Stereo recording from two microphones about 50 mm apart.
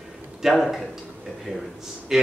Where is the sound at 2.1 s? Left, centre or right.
Centre.